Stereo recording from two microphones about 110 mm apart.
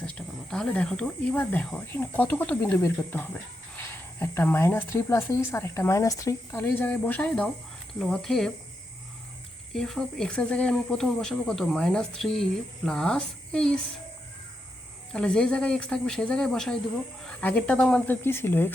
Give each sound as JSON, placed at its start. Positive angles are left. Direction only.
{"t": 0.0, "sound": "speech", "side_deg": 10}
{"t": 6.6, "sound": "speech", "side_deg": 15}
{"t": 9.7, "sound": "speech", "side_deg": 5}
{"t": 15.1, "sound": "speech", "side_deg": 10}